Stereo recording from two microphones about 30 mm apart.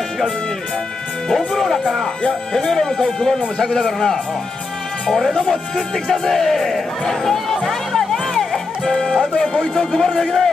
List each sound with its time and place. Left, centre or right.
1.3 s speech: centre
5.3 s speech: centre
7.6 s music: centre
9.4 s speech: left
9.9 s speech: centre